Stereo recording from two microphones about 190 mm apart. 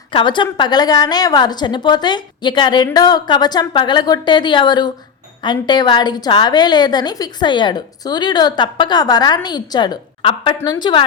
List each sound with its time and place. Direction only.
0.1 s a woman's voice: 25° left (ahead or behind)